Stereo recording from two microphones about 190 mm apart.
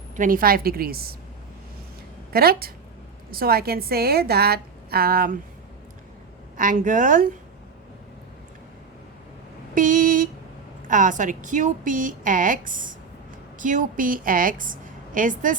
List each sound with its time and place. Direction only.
0.2 s speech: 50° right (ahead or behind)
2.3 s speech: 55° right (ahead or behind)
6.6 s speech: 45° right (ahead or behind)
9.7 s a sound: 45° right (ahead or behind)
10.8 s speech: 45° right (ahead or behind)